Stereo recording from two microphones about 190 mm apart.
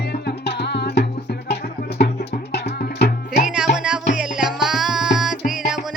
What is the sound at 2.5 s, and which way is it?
Music, 60° left (ahead or behind).